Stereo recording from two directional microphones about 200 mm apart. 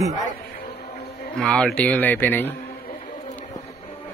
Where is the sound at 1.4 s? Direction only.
5° left (ahead or behind).